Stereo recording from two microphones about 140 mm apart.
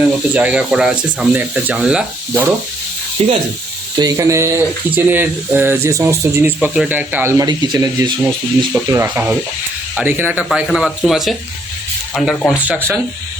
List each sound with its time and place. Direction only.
0.0 s speech: 10° right (ahead or behind)
3.2 s speech: 45° right (ahead or behind)
3.9 s speech: 25° right (ahead or behind)
8.7 s speech: 15° right (ahead or behind); by 12.5 s centre (ahead or behind)
12.5 s speech: 10° right (ahead or behind)